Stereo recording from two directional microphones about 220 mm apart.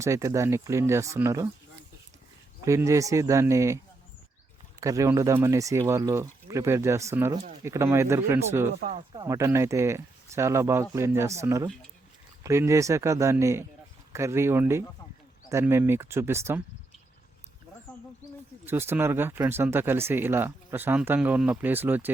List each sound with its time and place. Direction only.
0.0 s speech: 15° right (ahead or behind)
2.6 s speech: 15° right (ahead or behind)
4.8 s speech: 15° right (ahead or behind)
8.8 s speech: 30° right (ahead or behind)
9.1 s speech: 15° right (ahead or behind)
18.6 s speech: 10° right (ahead or behind)